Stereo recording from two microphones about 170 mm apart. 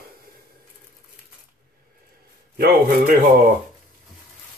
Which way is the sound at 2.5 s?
60° right (ahead or behind).